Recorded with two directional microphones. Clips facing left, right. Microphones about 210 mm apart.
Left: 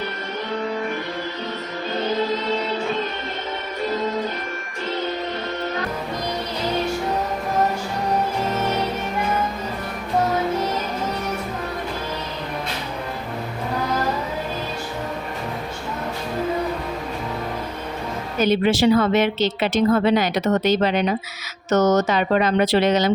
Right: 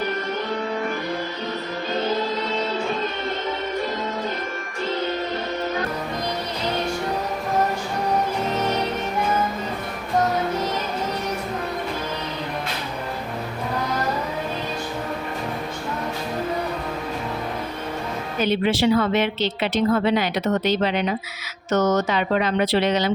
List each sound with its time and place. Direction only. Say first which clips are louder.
18.3 s a woman's voice: left 3 dB; 40° left (ahead or behind)